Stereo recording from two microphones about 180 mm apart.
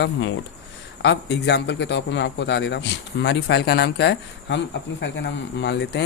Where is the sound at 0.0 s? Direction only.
90° left.